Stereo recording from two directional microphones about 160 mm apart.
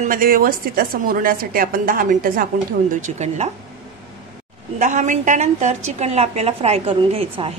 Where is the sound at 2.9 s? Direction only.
45° right (ahead or behind).